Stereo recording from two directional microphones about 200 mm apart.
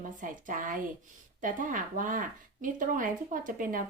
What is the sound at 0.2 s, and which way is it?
A woman's voice, 40° right (ahead or behind).